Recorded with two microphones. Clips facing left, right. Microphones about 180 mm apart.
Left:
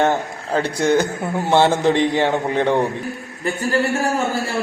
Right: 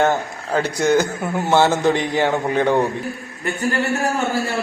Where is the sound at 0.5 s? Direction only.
30° left (ahead or behind).